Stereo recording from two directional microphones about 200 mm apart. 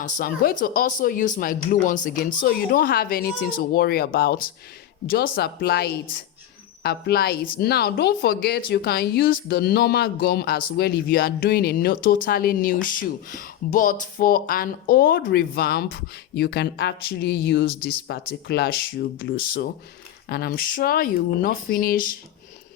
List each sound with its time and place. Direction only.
0.0 s speech: 45° left (ahead or behind)